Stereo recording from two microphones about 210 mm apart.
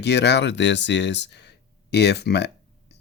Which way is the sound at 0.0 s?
55° left (ahead or behind).